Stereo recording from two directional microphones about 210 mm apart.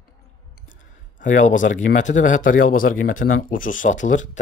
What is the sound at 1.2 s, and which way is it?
Speech, 35° left (ahead or behind).